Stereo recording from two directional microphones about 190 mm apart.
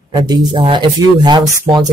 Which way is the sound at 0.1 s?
20° right (ahead or behind).